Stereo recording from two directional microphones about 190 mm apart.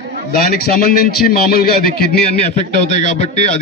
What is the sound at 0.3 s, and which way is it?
A man's voice, 55° left (ahead or behind).